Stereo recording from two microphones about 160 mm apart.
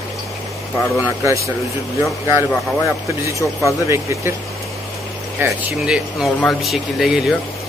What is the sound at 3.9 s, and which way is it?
Speech, 15° right (ahead or behind).